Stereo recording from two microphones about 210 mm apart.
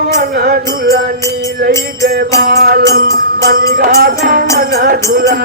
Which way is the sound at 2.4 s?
45° right (ahead or behind).